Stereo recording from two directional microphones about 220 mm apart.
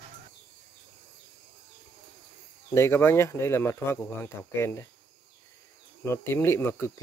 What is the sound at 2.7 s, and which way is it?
Speech, 10° left (ahead or behind).